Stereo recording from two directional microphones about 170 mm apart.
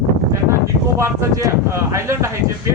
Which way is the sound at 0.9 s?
20° right (ahead or behind).